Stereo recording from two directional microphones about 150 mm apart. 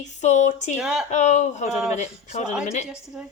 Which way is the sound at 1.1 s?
50° left (ahead or behind).